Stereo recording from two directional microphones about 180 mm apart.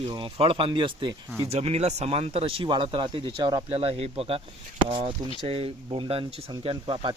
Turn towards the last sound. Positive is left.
turn(degrees=-30)  # may be behind; listen again after turning